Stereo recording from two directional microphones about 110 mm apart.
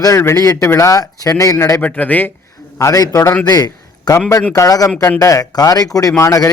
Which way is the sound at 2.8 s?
30° left (ahead or behind).